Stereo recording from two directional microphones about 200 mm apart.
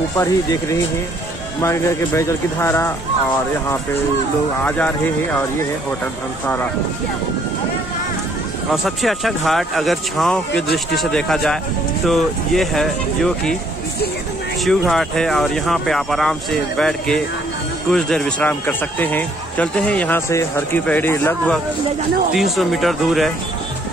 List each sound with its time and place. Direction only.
0.2 s speech: 15° left (ahead or behind)
4.6 s speech: 5° left (ahead or behind)
6.4 s speech: 10° left (ahead or behind)
8.8 s speech: centre (ahead or behind)
10.5 s speech: 55° left (ahead or behind)
11.0 s speech: 5° left (ahead or behind)
14.6 s speech: centre (ahead or behind)
22.3 s speech: centre (ahead or behind)